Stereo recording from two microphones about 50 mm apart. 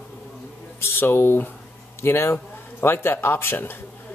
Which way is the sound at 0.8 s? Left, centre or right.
Left.